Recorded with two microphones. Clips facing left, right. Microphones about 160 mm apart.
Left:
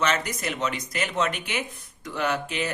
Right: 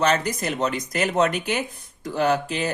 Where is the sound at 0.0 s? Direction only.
35° right (ahead or behind).